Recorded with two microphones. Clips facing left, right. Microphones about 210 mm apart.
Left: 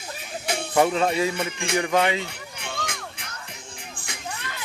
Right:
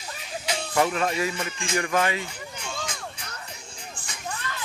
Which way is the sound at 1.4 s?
65° left (ahead or behind).